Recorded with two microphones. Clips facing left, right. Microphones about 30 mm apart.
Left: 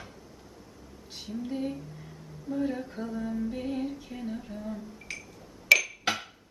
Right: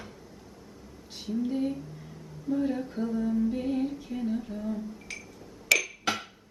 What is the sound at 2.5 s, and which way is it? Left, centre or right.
Female singing, centre.